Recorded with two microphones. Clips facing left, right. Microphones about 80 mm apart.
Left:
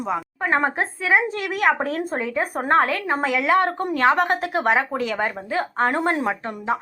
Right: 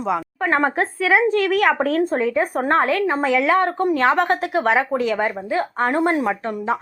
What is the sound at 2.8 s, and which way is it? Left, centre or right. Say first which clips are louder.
Speech: right 1 dB; right.